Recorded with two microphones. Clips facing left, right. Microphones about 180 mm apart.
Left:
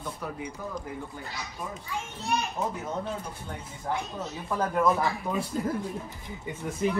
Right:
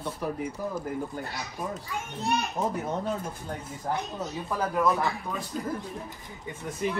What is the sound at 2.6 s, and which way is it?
Speech, 20° right (ahead or behind).